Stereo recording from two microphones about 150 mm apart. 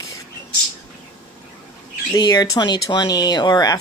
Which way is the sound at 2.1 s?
25° left (ahead or behind).